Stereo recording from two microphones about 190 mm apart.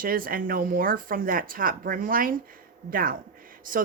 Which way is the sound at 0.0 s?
50° right (ahead or behind).